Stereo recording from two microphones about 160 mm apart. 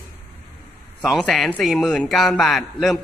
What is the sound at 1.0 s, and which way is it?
A man's voice, centre (ahead or behind).